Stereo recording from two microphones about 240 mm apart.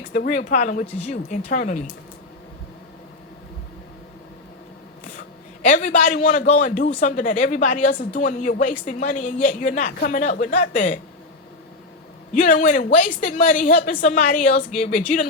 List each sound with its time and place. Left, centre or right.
0.1 s a man's voice: left
5.6 s a man's voice: left
12.3 s a man's voice: left